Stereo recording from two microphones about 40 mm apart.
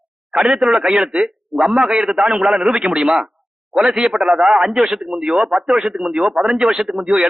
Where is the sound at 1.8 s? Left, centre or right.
Right.